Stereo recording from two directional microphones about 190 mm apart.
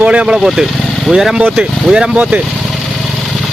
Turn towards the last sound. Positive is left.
turn(degrees=0)  # may be behind; listen again after turning